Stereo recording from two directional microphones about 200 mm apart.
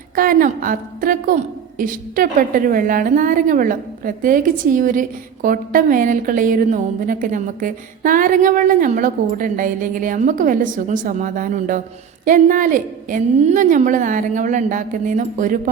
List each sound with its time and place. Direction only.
0.2 s a woman's voice: 45° right (ahead or behind)